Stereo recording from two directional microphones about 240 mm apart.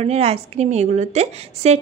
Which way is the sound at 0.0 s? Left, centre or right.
Right.